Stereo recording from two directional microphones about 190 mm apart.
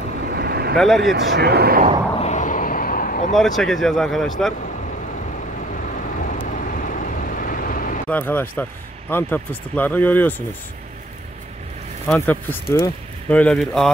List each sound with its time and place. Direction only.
0.4 s vehicle: 55° right (ahead or behind)
0.7 s speech: centre (ahead or behind)
1.1 s speech: 60° right (ahead or behind)
2.1 s a sound: 35° left (ahead or behind)
3.3 s speech: centre (ahead or behind)
6.1 s vehicle: 45° left (ahead or behind)
8.1 s speech: 10° left (ahead or behind)
12.1 s speech: 10° left (ahead or behind)